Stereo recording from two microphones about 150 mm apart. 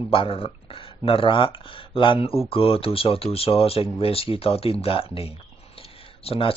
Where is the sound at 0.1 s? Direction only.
35° left (ahead or behind).